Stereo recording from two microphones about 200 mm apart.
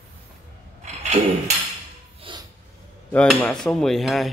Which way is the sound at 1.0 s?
35° right (ahead or behind).